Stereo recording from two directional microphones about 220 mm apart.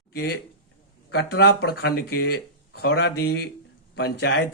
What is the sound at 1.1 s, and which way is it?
Speech, 50° left (ahead or behind).